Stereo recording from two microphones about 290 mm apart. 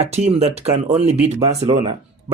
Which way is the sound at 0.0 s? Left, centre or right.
Right.